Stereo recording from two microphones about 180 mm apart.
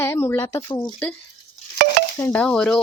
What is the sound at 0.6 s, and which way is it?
Speech, 25° left (ahead or behind).